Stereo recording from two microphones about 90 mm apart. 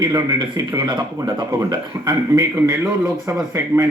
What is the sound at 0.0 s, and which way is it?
A man's voice, 50° right (ahead or behind).